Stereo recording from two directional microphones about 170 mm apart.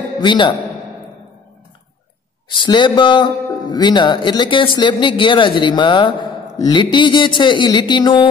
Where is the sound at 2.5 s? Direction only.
25° left (ahead or behind).